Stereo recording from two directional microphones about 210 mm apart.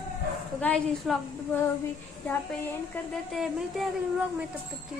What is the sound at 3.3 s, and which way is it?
Speech, centre (ahead or behind).